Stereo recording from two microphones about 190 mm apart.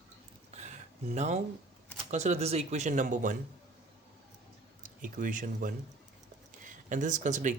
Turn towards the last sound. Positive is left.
turn(degrees=-40)  # may be behind; listen again after turning